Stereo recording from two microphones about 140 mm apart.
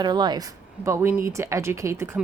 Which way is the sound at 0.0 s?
30° right (ahead or behind).